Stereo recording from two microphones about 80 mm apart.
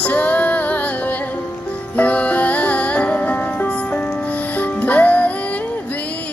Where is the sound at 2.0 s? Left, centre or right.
Centre.